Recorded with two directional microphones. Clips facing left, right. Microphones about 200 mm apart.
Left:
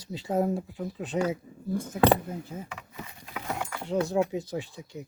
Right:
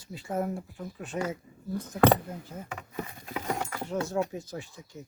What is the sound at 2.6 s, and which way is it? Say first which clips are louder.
Speech: right 5 dB; 45° right (ahead or behind).